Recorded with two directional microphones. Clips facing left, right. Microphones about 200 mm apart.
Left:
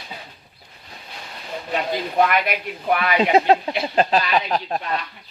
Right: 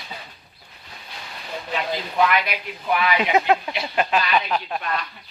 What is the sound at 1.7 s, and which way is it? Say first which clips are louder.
Speech: left 3 dB; 45° left (ahead or behind).